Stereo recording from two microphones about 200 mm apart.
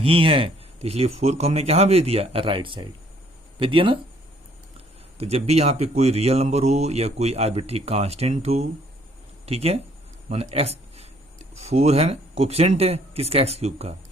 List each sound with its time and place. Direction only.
0.0 s speech: 25° right (ahead or behind)
5.1 s speech: 30° right (ahead or behind)
10.2 s a sound: 35° right (ahead or behind)
11.5 s speech: 30° right (ahead or behind)